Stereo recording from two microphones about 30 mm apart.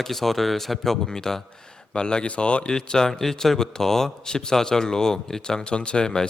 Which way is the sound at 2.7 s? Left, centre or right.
Left.